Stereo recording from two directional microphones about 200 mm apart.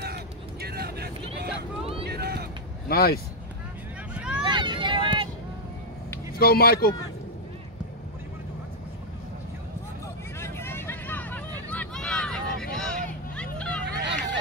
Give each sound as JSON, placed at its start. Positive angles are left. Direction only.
{"t": 0.0, "sound": "vehicle", "side_deg": -55}
{"t": 2.0, "sound": "a sound", "side_deg": -55}
{"t": 2.9, "sound": "speech", "side_deg": 50}
{"t": 4.1, "sound": "vehicle", "side_deg": -5}
{"t": 4.4, "sound": "vehicle", "side_deg": -25}
{"t": 6.3, "sound": "speech", "side_deg": 50}
{"t": 10.4, "sound": "hubbub", "side_deg": 10}
{"t": 12.7, "sound": "vehicle", "side_deg": 5}
{"t": 14.0, "sound": "a sound", "side_deg": -60}